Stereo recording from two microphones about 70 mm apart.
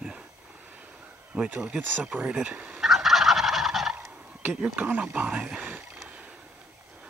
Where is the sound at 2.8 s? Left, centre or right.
Centre.